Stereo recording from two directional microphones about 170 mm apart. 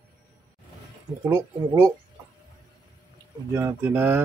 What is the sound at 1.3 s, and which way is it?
Speech, 15° right (ahead or behind).